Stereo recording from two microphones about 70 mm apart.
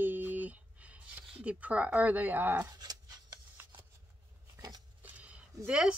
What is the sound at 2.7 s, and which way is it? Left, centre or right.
Dog, right.